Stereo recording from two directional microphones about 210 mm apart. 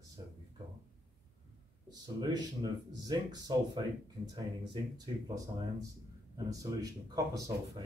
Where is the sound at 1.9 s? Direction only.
20° right (ahead or behind).